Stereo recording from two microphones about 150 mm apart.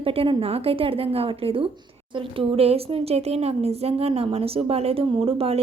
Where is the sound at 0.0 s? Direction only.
40° right (ahead or behind).